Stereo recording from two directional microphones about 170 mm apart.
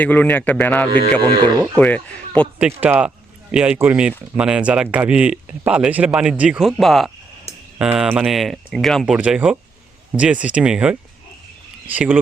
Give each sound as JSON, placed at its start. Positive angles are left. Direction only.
{"t": 0.0, "sound": "speech", "side_deg": 10}
{"t": 0.9, "sound": "speech", "side_deg": -30}
{"t": 1.7, "sound": "speech", "side_deg": 5}
{"t": 2.6, "sound": "speech", "side_deg": -10}
{"t": 11.9, "sound": "speech", "side_deg": -10}